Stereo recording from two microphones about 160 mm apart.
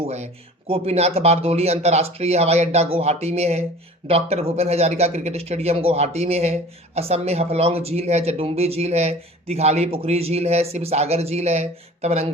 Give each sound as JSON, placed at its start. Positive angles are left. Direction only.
{"t": 0.7, "sound": "a man's voice", "side_deg": -40}